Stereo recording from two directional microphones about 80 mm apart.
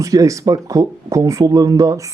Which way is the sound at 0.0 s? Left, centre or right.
Right.